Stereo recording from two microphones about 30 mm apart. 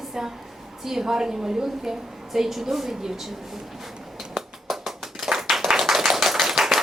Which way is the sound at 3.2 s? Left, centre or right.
Centre.